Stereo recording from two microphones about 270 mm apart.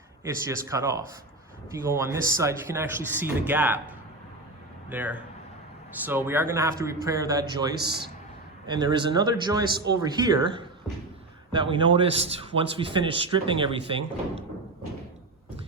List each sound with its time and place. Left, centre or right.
0.3 s speech: centre
4.9 s speech: centre
7.8 s a man's voice: right
8.6 s a man's voice: centre